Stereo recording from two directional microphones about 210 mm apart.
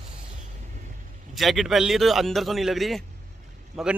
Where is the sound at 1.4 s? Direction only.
Centre (ahead or behind).